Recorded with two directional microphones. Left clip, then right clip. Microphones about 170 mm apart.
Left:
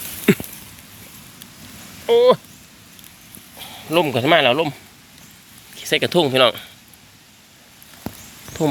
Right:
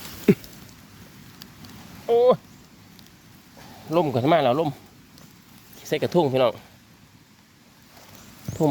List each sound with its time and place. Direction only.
0.3 s a sound: 10° right (ahead or behind)
2.0 s speech: 30° left (ahead or behind)
3.6 s speech: 5° right (ahead or behind)
5.8 s speech: 5° right (ahead or behind)